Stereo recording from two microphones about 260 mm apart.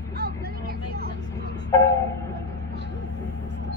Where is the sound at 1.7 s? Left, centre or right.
Centre.